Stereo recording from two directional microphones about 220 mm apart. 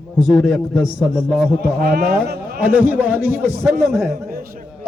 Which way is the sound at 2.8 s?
10° right (ahead or behind).